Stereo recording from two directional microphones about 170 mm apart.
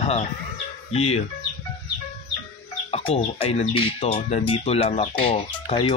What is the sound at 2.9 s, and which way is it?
Speech, 35° left (ahead or behind).